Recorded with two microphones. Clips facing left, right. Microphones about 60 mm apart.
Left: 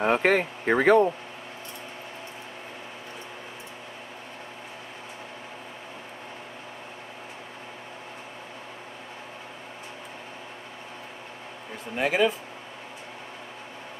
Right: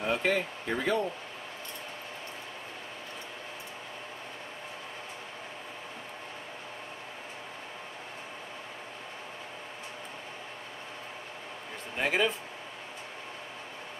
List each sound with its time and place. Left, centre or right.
0.0 s speech: left
12.0 s speech: centre